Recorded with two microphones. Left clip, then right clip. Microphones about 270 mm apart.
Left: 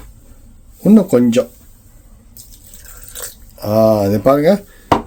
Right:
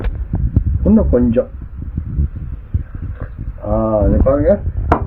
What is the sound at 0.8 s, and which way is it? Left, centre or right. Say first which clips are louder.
Speech: left 2 dB; left.